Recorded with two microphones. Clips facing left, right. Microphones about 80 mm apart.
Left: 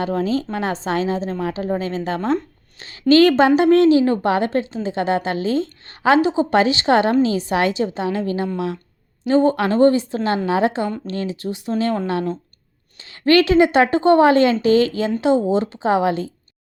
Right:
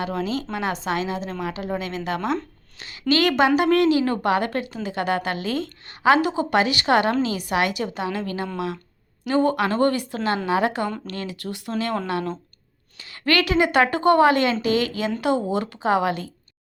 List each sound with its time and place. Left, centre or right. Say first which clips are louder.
0.0 s a woman's voice: left 5 dB; left